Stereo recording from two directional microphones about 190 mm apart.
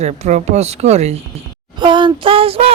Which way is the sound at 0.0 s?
35° right (ahead or behind).